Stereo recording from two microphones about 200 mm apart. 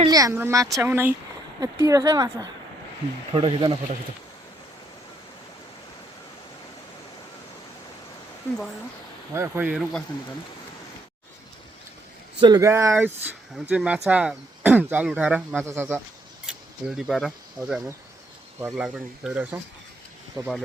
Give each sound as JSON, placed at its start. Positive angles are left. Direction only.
{"t": 0.0, "sound": "speech", "side_deg": -15}
{"t": 9.3, "sound": "speech", "side_deg": -10}
{"t": 12.4, "sound": "speech", "side_deg": -20}
{"t": 16.5, "sound": "speech", "side_deg": 0}
{"t": 20.4, "sound": "speech", "side_deg": -20}